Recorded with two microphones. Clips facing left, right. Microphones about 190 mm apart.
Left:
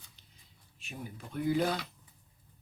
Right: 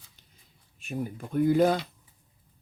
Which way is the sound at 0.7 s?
50° right (ahead or behind).